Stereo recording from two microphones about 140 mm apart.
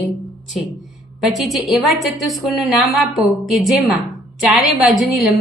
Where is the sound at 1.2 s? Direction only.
Centre (ahead or behind).